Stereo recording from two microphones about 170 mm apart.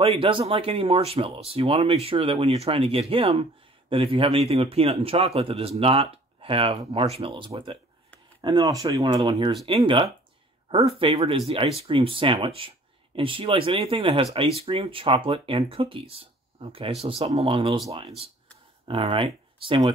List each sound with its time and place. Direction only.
0.2 s speech: 30° right (ahead or behind)